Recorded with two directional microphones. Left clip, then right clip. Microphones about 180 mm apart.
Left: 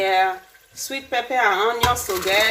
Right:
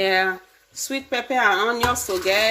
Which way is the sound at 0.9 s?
55° right (ahead or behind).